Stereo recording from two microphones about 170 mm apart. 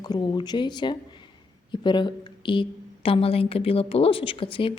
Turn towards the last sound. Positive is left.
turn(degrees=30)  # may be behind; listen again after turning